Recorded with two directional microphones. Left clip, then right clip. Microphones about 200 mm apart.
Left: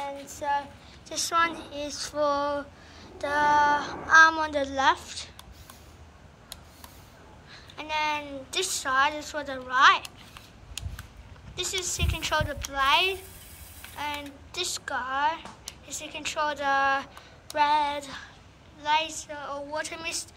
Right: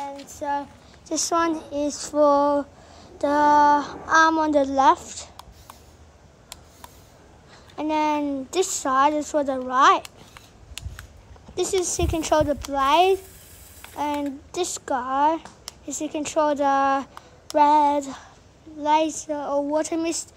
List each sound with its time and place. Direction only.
0.0 s a child's voice: 55° right (ahead or behind)
7.7 s a woman's voice: 45° right (ahead or behind)
11.5 s a woman's voice: 40° right (ahead or behind)
17.6 s child singing: 45° right (ahead or behind)
18.8 s a woman's voice: 40° right (ahead or behind)